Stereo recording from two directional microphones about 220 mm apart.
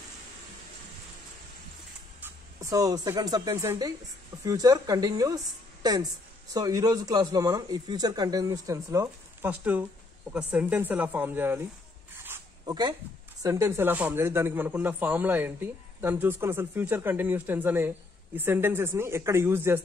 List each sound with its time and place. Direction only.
2.6 s speech: 15° right (ahead or behind)
12.2 s dog: 15° right (ahead or behind)
13.4 s speech: 15° right (ahead or behind)